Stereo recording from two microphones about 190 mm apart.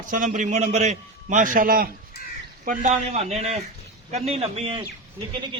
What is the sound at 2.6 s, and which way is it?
A man's voice, 40° right (ahead or behind).